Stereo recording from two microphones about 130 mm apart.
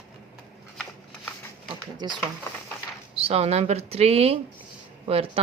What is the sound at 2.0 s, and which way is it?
Speech, 35° right (ahead or behind).